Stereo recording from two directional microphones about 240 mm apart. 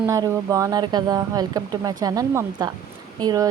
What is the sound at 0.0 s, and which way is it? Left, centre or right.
A woman's voice, centre.